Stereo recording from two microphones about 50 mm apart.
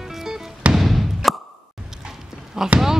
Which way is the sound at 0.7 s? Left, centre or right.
Centre.